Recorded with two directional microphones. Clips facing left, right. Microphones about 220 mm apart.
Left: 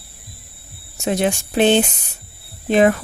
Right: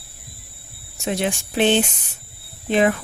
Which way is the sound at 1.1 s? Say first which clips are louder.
Left 4 dB; 40° left (ahead or behind).